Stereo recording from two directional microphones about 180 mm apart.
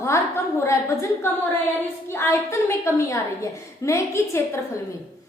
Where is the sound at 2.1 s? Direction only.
15° left (ahead or behind).